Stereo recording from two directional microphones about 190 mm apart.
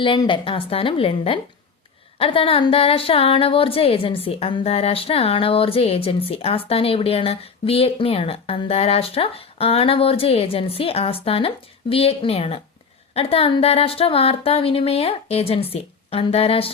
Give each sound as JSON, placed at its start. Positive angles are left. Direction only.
{"t": 0.0, "sound": "a woman's voice", "side_deg": 25}